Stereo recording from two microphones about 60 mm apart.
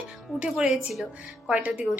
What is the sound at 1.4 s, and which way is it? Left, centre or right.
Speech, right.